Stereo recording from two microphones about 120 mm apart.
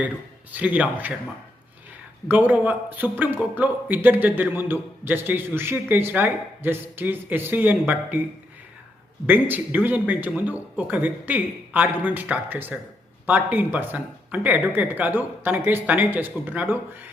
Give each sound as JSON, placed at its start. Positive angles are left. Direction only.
{"t": 0.5, "sound": "a man's voice", "side_deg": -15}
{"t": 2.2, "sound": "a man's voice", "side_deg": -15}
{"t": 9.2, "sound": "a man's voice", "side_deg": -15}